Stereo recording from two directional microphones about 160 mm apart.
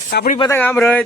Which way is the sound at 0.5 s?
10° left (ahead or behind).